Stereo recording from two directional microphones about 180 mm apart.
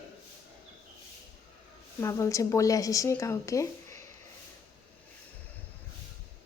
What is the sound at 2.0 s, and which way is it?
Speech, 15° left (ahead or behind).